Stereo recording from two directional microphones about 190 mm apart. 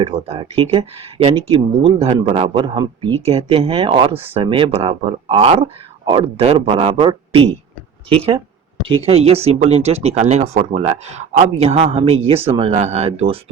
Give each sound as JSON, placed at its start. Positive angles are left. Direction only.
{"t": 0.0, "sound": "speech", "side_deg": -30}